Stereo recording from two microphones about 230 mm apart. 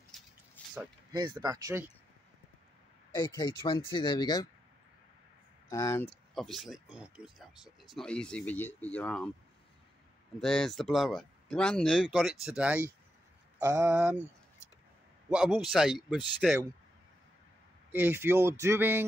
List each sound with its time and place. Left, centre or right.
0.1 s a sound: centre
1.1 s speech: centre
3.2 s speech: centre
5.7 s speech: centre
6.3 s speech: centre
10.4 s speech: centre
15.2 s speech: centre
17.9 s speech: centre